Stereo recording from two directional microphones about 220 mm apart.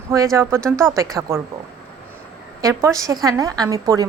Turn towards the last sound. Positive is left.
turn(degrees=-15)  # may be behind; listen again after turning